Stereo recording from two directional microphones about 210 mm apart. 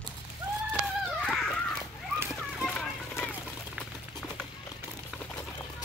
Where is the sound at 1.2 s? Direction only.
Centre (ahead or behind).